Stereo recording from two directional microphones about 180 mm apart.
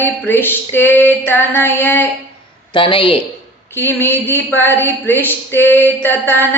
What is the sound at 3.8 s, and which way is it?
Speech, 10° left (ahead or behind).